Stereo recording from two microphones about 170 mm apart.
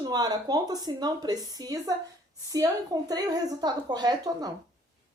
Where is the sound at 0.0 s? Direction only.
25° right (ahead or behind).